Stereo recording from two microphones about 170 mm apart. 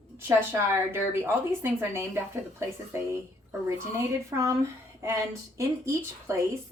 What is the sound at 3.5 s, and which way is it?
Speech, 15° right (ahead or behind).